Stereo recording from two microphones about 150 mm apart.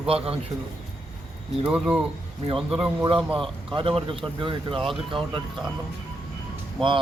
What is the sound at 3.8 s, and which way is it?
Speech, 35° right (ahead or behind).